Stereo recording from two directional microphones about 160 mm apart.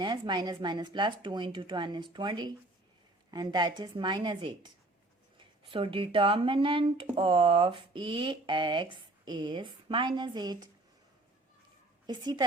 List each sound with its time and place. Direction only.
0.0 s speech: 30° right (ahead or behind)
5.7 s speech: 35° right (ahead or behind)
12.0 s speech: 25° right (ahead or behind)